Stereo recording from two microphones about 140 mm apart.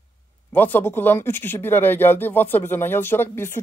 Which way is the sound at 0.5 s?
15° left (ahead or behind).